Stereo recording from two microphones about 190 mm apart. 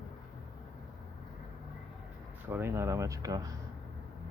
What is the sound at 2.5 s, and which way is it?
Speech, 15° right (ahead or behind).